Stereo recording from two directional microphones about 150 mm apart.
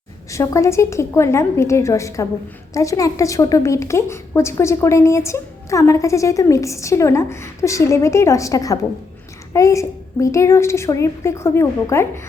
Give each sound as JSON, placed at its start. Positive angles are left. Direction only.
{"t": 0.3, "sound": "a woman's voice", "side_deg": 20}